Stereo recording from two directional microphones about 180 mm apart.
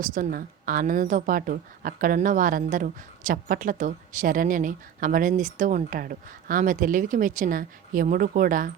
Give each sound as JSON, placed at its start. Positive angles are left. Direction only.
{"t": 0.0, "sound": "speech", "side_deg": -50}